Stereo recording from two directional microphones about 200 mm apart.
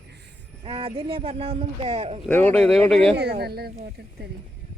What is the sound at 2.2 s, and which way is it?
Speech, 10° left (ahead or behind).